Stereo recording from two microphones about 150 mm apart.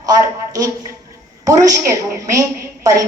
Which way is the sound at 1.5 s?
20° right (ahead or behind).